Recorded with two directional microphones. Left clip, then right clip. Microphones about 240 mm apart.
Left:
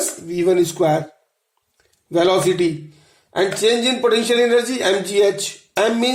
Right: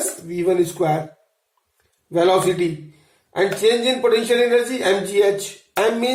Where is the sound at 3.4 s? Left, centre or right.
Left.